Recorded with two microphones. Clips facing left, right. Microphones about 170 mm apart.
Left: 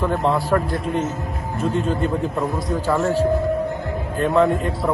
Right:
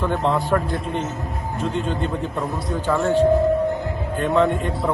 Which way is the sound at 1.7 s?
40° left (ahead or behind).